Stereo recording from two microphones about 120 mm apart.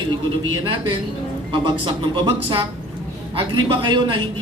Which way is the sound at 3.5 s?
40° right (ahead or behind).